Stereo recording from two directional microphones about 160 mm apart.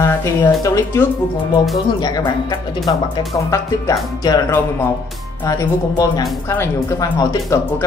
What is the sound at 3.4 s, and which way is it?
Speech, 20° left (ahead or behind).